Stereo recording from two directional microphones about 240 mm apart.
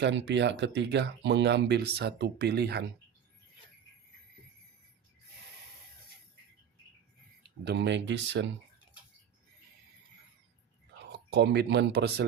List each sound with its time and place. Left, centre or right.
0.0 s speech: right
7.4 s speech: right
11.1 s speech: right